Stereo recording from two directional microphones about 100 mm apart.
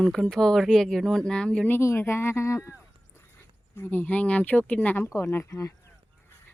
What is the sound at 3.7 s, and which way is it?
A woman's voice, 20° left (ahead or behind).